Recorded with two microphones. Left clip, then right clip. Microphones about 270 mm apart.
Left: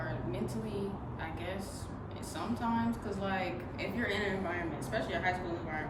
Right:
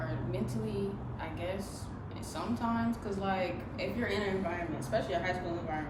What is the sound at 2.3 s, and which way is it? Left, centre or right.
A woman's voice, centre.